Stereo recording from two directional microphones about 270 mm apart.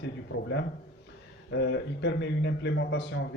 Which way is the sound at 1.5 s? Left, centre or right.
Left.